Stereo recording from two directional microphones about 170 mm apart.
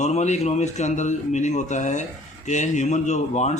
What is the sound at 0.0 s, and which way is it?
A man's voice, 40° left (ahead or behind).